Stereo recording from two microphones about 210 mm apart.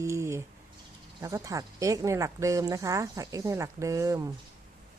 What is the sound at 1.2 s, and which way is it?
Speech, 15° right (ahead or behind).